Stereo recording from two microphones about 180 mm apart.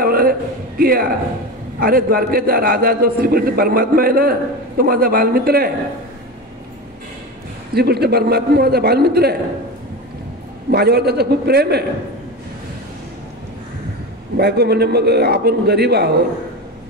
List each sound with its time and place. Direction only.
0.0 s a sound: 55° right (ahead or behind)
1.8 s a man's voice: 55° right (ahead or behind)
7.7 s a man's voice: 60° right (ahead or behind)
10.7 s a man's voice: 60° right (ahead or behind)
14.3 s a man's voice: 60° right (ahead or behind)